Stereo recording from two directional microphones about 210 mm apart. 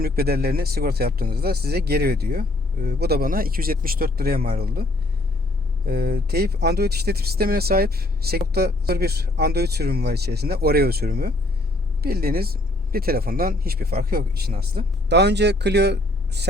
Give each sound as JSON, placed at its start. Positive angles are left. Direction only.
{"t": 0.0, "sound": "speech", "side_deg": -45}